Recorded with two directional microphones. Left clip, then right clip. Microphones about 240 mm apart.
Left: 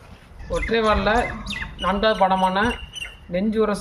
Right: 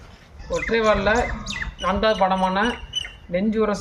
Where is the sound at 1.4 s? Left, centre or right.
Centre.